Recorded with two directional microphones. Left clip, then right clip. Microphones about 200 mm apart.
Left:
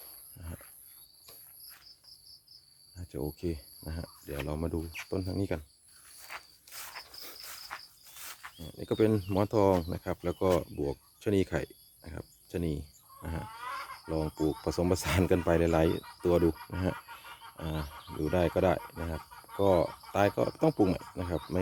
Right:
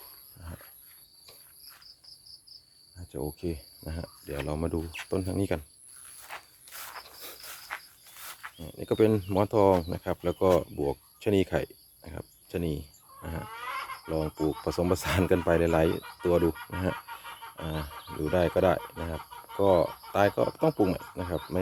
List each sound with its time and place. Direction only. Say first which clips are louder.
3.1 s speech: right 2 dB; 5° left (ahead or behind)
4.8 s speech: right 3 dB; 25° right (ahead or behind)
5.0 s speech: right 5 dB; 10° right (ahead or behind)
6.1 s cricket: right 1 dB; 10° right (ahead or behind)
8.2 s speech: right 3 dB; 5° right (ahead or behind)
13.2 s pig: right 2 dB; 5° left (ahead or behind)
14.1 s speech: right 2 dB; centre (ahead or behind)